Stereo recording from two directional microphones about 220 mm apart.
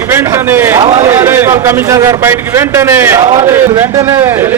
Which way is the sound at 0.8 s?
30° right (ahead or behind).